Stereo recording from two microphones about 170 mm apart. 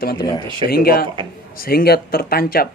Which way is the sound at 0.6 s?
65° left (ahead or behind).